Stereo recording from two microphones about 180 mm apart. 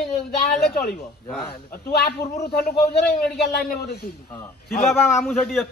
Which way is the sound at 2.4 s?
60° left (ahead or behind).